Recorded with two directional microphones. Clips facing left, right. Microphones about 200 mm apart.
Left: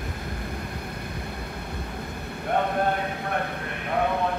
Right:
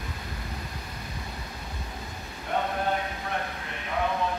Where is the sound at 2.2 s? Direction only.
60° left (ahead or behind).